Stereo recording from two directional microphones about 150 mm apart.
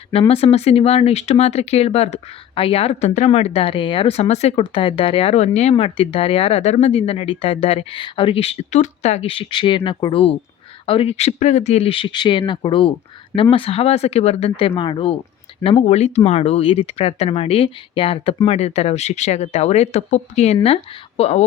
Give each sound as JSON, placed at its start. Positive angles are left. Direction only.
{"t": 0.1, "sound": "speech", "side_deg": 40}
{"t": 4.6, "sound": "speech", "side_deg": 35}
{"t": 15.9, "sound": "speech", "side_deg": 45}